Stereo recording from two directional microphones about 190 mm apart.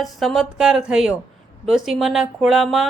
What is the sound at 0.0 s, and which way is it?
A woman's voice, centre (ahead or behind).